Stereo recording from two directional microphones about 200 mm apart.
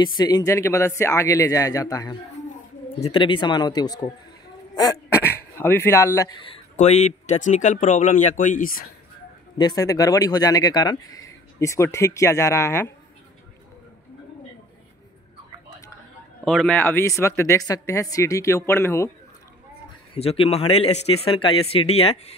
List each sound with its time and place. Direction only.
0.0 s speech: 20° left (ahead or behind)
5.6 s a man's voice: 10° left (ahead or behind); by 8.8 s 45° left (ahead or behind)
9.6 s speech: 20° left (ahead or behind)
16.4 s speech: 5° left (ahead or behind)
20.2 s a man's voice: 30° left (ahead or behind)